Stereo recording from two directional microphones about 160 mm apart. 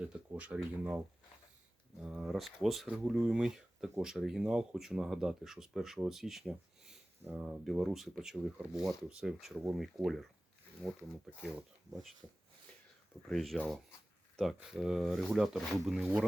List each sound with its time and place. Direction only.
0.0 s speech: 10° right (ahead or behind)
2.0 s speech: 5° right (ahead or behind)
11.3 s speech: 5° right (ahead or behind)
13.2 s speech: centre (ahead or behind)